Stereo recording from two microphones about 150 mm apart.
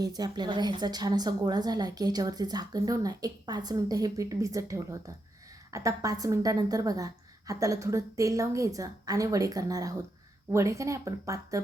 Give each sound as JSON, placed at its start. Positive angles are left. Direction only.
{"t": 0.0, "sound": "a woman's voice", "side_deg": -25}